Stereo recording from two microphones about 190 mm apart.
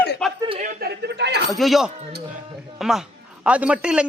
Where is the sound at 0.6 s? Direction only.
55° right (ahead or behind).